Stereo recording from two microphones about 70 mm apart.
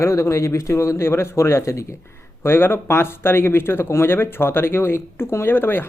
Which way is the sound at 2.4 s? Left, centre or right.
Left.